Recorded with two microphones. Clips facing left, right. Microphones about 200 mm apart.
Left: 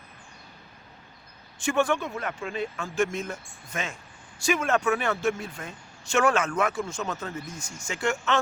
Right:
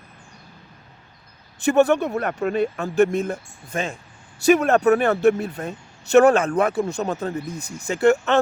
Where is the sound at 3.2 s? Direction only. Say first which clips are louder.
Right 8 dB; 35° right (ahead or behind).